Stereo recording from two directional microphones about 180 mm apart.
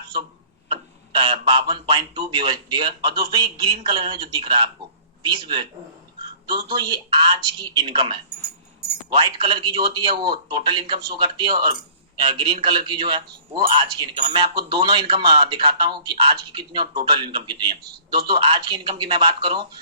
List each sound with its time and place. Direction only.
0.7 s speech: 25° right (ahead or behind)
6.7 s speech: 25° right (ahead or behind)